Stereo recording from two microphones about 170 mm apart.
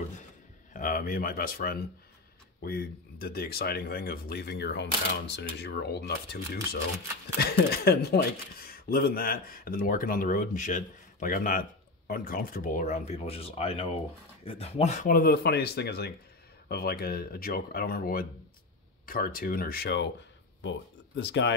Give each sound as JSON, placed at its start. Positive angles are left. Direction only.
{"t": 0.7, "sound": "speech", "side_deg": 55}
{"t": 15.0, "sound": "speech", "side_deg": 65}
{"t": 21.2, "sound": "speech", "side_deg": 90}